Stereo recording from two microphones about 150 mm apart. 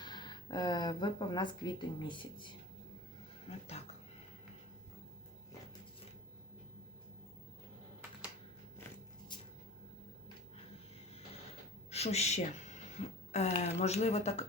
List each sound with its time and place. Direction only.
0.0 s speech: 30° left (ahead or behind)
3.5 s speech: 40° left (ahead or behind)
9.3 s a sound: 30° left (ahead or behind)
11.9 s speech: 45° left (ahead or behind)
13.0 s a sound: 45° left (ahead or behind)
13.6 s speech: 45° left (ahead or behind)